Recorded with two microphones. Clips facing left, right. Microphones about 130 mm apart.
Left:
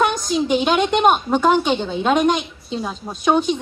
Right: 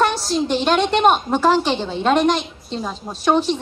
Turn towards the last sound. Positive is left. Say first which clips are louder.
# even
turn(degrees=0)  # may be behind; listen again after turning